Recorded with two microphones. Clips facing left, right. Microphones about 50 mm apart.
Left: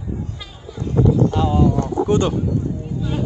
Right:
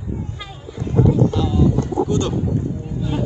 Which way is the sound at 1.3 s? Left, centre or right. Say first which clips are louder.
Left 2 dB; left.